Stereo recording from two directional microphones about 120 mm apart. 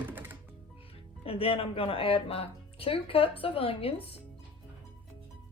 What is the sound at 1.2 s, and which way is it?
Speech, 50° left (ahead or behind).